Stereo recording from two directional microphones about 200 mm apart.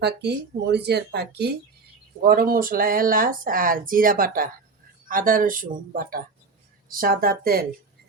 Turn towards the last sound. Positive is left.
turn(degrees=-50)  # may be behind; listen again after turning